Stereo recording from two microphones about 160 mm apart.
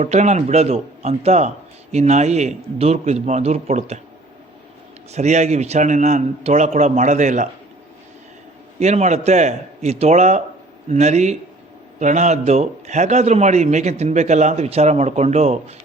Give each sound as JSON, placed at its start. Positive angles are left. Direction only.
{"t": 0.0, "sound": "speech", "side_deg": -45}
{"t": 5.1, "sound": "speech", "side_deg": -45}
{"t": 8.8, "sound": "speech", "side_deg": -45}